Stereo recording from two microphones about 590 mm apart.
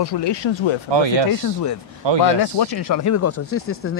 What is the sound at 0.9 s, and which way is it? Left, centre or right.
Speech, right.